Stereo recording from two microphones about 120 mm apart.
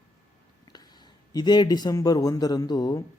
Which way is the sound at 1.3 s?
35° left (ahead or behind).